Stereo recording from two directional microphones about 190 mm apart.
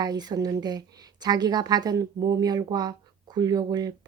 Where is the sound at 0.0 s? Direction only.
20° right (ahead or behind).